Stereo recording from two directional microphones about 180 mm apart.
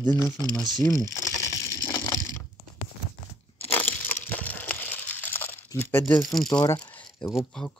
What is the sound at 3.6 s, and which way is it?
Crushing, 10° left (ahead or behind).